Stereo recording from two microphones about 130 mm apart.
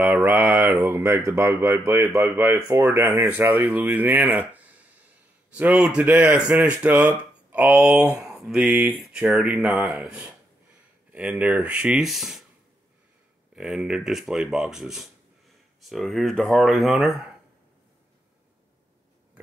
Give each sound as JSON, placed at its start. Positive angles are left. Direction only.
{"t": 0.0, "sound": "speech", "side_deg": -15}
{"t": 13.6, "sound": "speech", "side_deg": -5}